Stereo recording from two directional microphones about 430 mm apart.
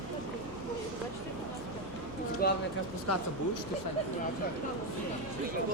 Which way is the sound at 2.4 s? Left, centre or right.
Left.